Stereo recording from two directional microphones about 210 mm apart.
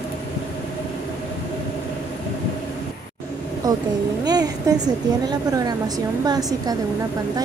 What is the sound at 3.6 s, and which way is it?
A woman's voice, 15° right (ahead or behind).